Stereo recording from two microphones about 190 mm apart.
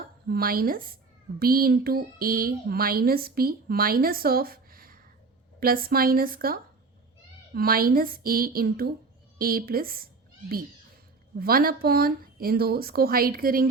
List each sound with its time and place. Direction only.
0.0 s speech: 50° right (ahead or behind)
11.3 s speech: 50° right (ahead or behind)